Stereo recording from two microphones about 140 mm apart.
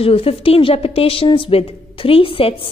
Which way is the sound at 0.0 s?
45° left (ahead or behind).